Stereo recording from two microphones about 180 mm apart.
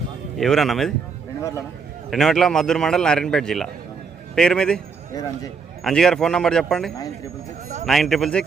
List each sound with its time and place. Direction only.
0.3 s a man's voice: centre (ahead or behind)
1.4 s a man's voice: 15° left (ahead or behind)
2.0 s a man's voice: centre (ahead or behind)
5.8 s a man's voice: 5° left (ahead or behind)